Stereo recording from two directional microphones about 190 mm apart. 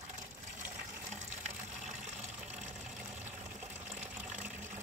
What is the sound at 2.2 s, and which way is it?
Water, 40° right (ahead or behind).